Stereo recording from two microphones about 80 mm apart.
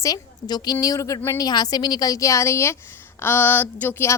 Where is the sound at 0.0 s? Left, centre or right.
Left.